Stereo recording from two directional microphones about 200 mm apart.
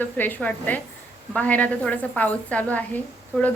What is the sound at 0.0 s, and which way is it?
A woman's voice, 10° left (ahead or behind).